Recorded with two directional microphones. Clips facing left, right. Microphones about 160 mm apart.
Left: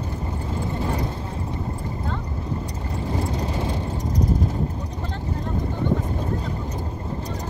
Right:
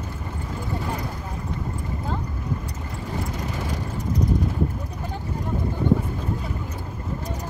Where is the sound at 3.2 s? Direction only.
30° left (ahead or behind).